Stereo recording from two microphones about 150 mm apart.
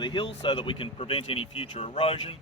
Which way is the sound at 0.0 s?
30° left (ahead or behind).